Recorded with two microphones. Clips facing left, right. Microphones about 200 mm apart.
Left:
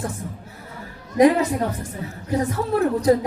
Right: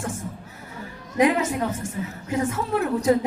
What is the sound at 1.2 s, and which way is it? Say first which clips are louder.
Speech: left 4 dB; 35° left (ahead or behind).